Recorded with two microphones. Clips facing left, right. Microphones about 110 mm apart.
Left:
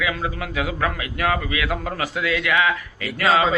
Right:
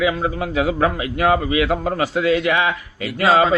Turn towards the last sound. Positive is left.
turn(degrees=-30)  # may be behind; listen again after turning